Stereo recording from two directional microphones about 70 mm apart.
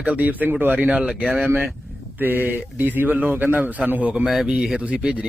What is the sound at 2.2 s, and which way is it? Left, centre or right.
A man's voice, right.